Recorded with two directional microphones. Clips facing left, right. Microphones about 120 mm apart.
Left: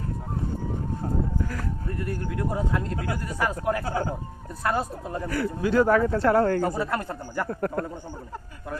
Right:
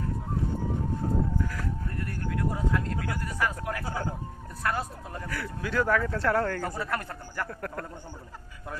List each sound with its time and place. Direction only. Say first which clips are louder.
2.0 s speech: left 3 dB; 20° left (ahead or behind)
3.8 s speech: left 5 dB; 75° left (ahead or behind)
4.6 s speech: left 4 dB; 25° left (ahead or behind)